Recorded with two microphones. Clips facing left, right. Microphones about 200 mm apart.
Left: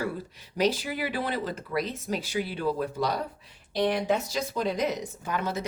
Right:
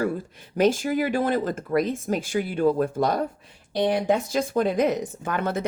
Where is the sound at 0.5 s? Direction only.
50° right (ahead or behind).